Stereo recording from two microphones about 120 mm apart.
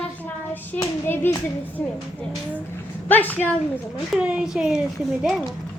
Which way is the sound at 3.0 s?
15° left (ahead or behind).